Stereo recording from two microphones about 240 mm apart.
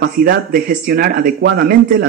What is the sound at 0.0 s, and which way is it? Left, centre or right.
Speech, right.